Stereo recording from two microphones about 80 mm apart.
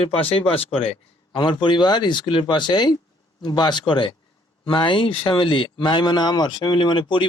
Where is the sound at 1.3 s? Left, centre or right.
Left.